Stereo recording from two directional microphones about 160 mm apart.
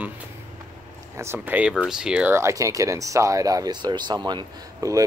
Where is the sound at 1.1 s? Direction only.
15° right (ahead or behind).